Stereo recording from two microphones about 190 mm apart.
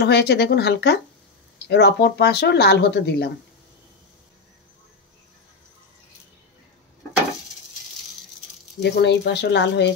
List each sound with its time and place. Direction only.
0.0 s speech: 60° left (ahead or behind)
8.8 s speech: 65° left (ahead or behind)